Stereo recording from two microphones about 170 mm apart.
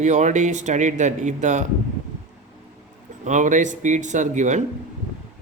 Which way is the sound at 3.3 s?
45° right (ahead or behind).